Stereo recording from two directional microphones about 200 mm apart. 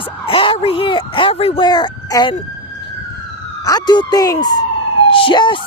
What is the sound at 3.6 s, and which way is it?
Speech, 20° left (ahead or behind).